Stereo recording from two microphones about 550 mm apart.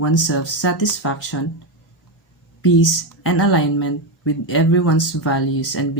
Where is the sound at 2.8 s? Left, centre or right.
Left.